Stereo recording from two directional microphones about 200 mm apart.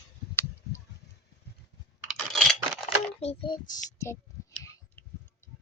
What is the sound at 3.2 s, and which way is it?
Speech, 25° left (ahead or behind).